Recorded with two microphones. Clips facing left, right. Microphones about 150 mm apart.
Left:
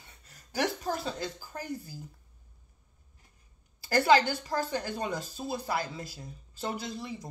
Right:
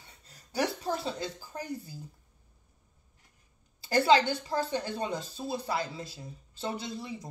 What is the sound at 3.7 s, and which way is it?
Speech, 25° right (ahead or behind).